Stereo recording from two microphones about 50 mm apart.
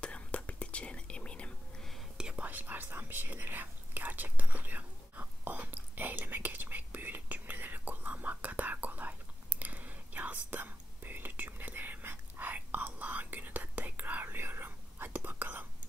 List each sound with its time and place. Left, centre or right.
0.0 s whispering: left
2.3 s speech: right
5.2 s whispering: right